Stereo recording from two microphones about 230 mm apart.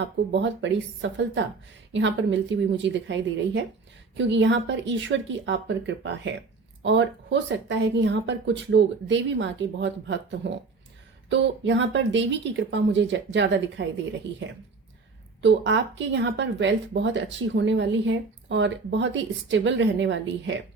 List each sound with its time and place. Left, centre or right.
0.0 s a woman's voice: right
11.3 s speech: right